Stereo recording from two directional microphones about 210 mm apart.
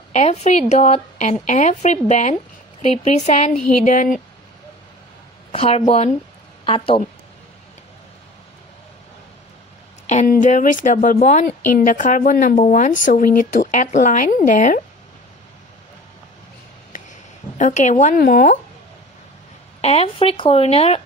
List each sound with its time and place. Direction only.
0.1 s speech: 30° left (ahead or behind)
5.5 s a woman's voice: 30° left (ahead or behind)
10.0 s speech: 40° left (ahead or behind)
17.6 s speech: 35° left (ahead or behind)
19.8 s speech: 30° left (ahead or behind)